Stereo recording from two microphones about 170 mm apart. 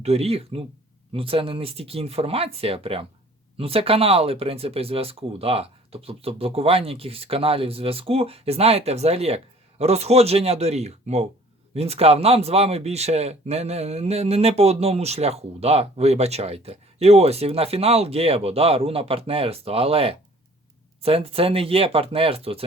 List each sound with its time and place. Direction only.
0.0 s speech: 35° right (ahead or behind)